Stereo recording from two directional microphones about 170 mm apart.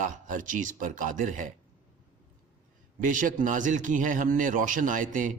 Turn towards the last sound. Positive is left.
turn(degrees=-50)  # may be behind; listen again after turning